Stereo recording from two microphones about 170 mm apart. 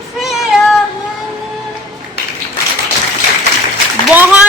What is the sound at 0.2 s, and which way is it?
Cat, centre (ahead or behind).